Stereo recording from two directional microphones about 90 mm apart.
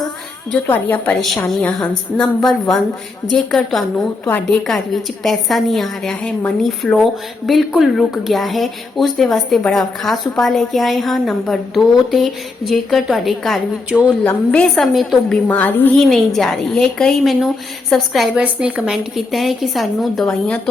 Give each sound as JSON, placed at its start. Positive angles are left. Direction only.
{"t": 0.7, "sound": "a woman's voice", "side_deg": 20}
{"t": 3.9, "sound": "a woman's voice", "side_deg": 15}
{"t": 5.2, "sound": "a woman's voice", "side_deg": 0}
{"t": 14.3, "sound": "a woman's voice", "side_deg": 15}
{"t": 14.8, "sound": "a woman's voice", "side_deg": 0}
{"t": 15.4, "sound": "a woman's voice", "side_deg": 20}
{"t": 16.0, "sound": "a woman's voice", "side_deg": 0}